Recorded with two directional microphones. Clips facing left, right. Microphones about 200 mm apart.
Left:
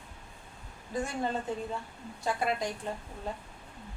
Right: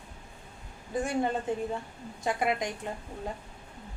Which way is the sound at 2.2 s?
15° right (ahead or behind).